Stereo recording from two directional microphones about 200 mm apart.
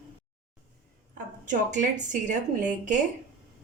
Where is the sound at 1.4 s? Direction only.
40° right (ahead or behind).